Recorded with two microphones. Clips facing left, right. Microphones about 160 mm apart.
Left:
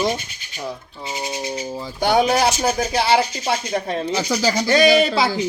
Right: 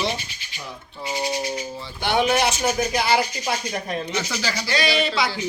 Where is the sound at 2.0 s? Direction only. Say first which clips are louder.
Left 4 dB; 35° left (ahead or behind).